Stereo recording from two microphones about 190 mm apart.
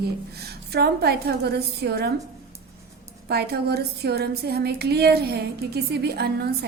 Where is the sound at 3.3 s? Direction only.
60° right (ahead or behind).